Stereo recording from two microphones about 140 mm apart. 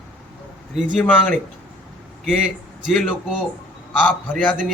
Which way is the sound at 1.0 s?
10° left (ahead or behind).